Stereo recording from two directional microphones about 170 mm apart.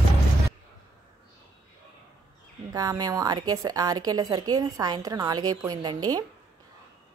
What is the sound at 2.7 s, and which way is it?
A woman's voice, 20° right (ahead or behind).